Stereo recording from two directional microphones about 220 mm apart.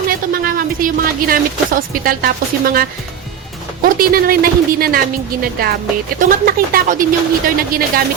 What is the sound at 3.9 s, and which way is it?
A woman's voice, 40° right (ahead or behind).